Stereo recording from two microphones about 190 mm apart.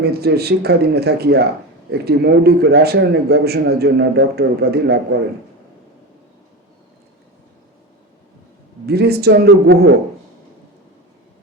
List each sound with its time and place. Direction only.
0.0 s a man's voice: 55° right (ahead or behind)
8.9 s a man's voice: 55° right (ahead or behind)